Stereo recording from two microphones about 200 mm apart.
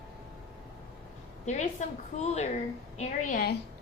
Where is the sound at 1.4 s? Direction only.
35° left (ahead or behind).